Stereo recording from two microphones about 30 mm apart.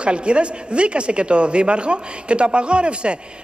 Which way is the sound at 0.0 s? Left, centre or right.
Right.